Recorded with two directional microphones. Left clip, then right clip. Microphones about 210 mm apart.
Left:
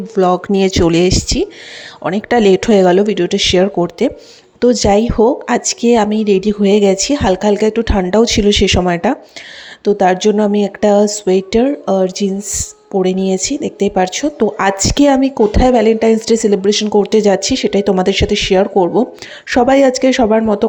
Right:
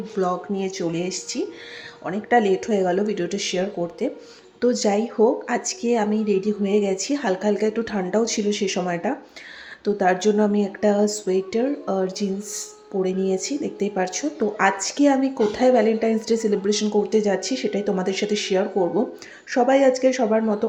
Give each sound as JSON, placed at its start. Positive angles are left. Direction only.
{"t": 0.2, "sound": "speech", "side_deg": 45}